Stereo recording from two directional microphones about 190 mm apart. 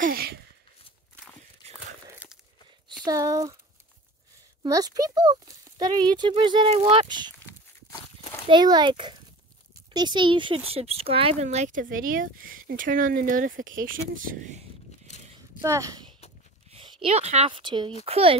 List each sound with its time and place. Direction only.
0.0 s a sound: 50° right (ahead or behind)
2.0 s a sound: 10° right (ahead or behind)
3.1 s speech: 15° right (ahead or behind)
4.6 s a child's voice: 20° right (ahead or behind)
8.5 s a child's voice: 20° right (ahead or behind); by 14.6 s 40° right (ahead or behind)
15.6 s a woman's voice: 15° right (ahead or behind)